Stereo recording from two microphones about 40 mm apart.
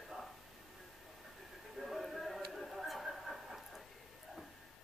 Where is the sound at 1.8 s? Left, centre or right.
Centre.